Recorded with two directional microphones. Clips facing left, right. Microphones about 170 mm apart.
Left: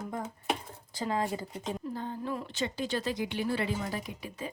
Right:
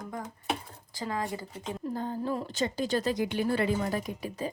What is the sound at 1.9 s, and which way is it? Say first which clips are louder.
A woman's voice: right 4 dB; 40° right (ahead or behind).